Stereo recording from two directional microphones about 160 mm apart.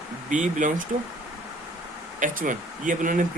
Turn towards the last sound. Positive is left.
turn(degrees=-55)  # may be behind; listen again after turning